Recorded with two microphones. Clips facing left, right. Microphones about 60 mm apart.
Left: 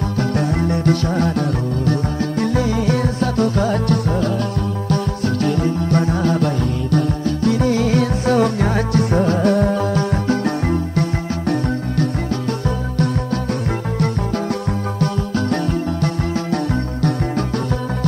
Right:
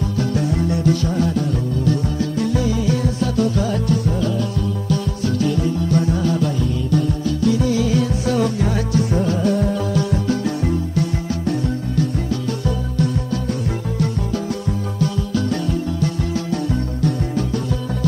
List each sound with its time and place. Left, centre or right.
0.2 s music: left
12.6 s music: left